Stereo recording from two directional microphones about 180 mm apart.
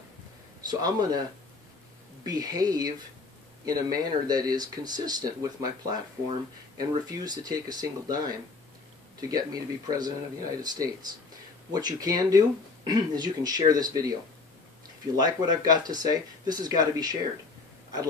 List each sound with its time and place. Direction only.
0.7 s speech: 20° right (ahead or behind)
2.2 s speech: 20° right (ahead or behind)
15.1 s speech: 20° right (ahead or behind)